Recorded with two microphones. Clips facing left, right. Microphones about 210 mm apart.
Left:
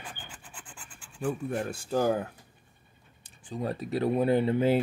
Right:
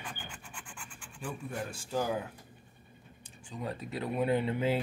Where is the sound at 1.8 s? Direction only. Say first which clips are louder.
Left 6 dB; 50° left (ahead or behind).